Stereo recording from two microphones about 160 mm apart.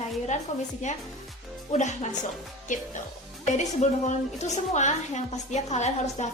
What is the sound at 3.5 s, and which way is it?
A woman's voice, 45° left (ahead or behind).